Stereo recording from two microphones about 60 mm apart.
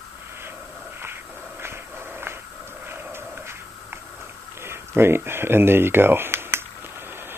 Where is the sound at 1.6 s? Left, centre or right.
Right.